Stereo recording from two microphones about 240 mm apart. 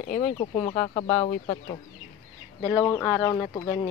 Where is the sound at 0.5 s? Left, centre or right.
Centre.